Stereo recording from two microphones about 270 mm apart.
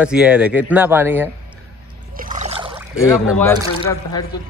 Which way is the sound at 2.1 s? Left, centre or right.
Right.